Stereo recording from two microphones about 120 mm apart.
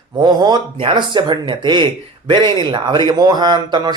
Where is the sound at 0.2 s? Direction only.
35° right (ahead or behind).